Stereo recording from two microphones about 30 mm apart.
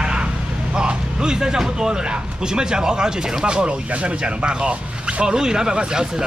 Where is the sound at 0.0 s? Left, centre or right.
Right.